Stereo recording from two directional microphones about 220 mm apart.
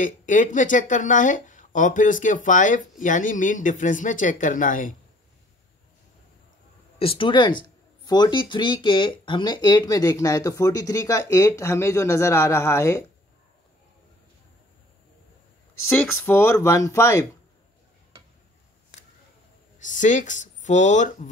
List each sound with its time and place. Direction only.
0.0 s speech: 35° left (ahead or behind)
7.0 s speech: 25° left (ahead or behind)
15.9 s speech: 10° left (ahead or behind)
19.8 s speech: 35° left (ahead or behind)